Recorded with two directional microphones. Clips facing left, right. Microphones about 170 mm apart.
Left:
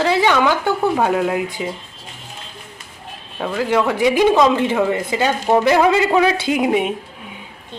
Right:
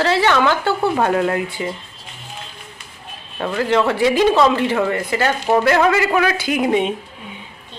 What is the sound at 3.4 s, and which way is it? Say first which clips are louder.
A woman's voice: right 1 dB; 10° left (ahead or behind).